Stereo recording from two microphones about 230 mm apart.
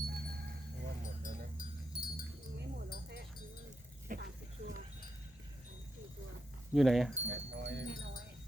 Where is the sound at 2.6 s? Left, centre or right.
Right.